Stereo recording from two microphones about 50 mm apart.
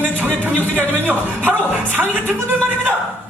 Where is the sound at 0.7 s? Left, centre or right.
Right.